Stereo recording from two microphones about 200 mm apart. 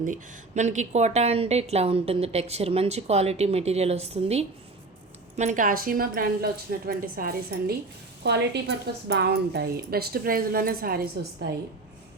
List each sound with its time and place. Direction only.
0.0 s a woman's voice: 40° right (ahead or behind)
8.2 s a woman's voice: 55° right (ahead or behind)